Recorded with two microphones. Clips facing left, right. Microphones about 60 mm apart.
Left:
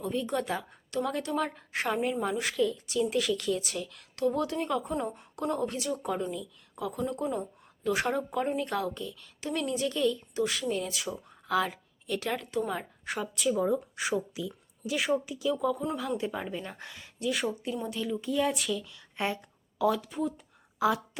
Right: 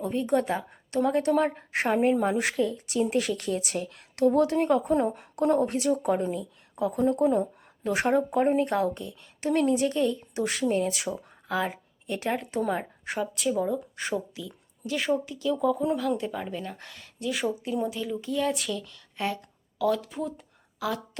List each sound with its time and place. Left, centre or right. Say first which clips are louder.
0.0 s a woman's voice: right 5 dB; right
1.7 s a woman's voice: right 6 dB; right
5.4 s a woman's voice: right 7 dB; right
10.9 s a woman's voice: right 3 dB; right
11.4 s a woman's voice: even; right
13.1 s speech: right 1 dB; centre
16.0 s a woman's voice: right 4 dB; centre
17.2 s speech: right 2 dB; centre
19.1 s a sound: right 1 dB; centre
19.9 s speech: right 2 dB; centre
20.8 s a woman's voice: left 4 dB; left